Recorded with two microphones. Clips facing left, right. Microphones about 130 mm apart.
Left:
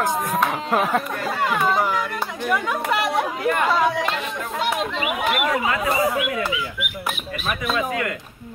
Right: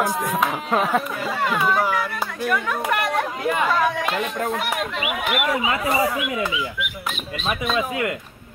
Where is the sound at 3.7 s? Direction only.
15° left (ahead or behind).